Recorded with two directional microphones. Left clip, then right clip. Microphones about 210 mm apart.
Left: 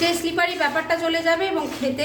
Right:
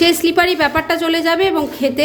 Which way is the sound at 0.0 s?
45° right (ahead or behind).